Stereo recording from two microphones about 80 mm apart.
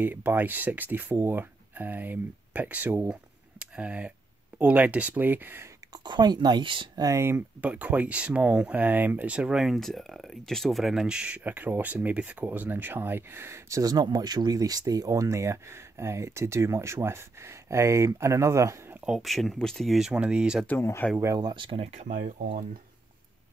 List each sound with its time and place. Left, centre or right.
0.0 s speech: right
3.1 s a sound: centre
4.6 s speech: centre
5.9 s speech: right
7.0 s speech: right
7.6 s speech: centre; by 13.8 s right
13.8 s speech: right
19.0 s speech: centre
20.1 s speech: centre
21.0 s speech: centre
21.4 s speech: right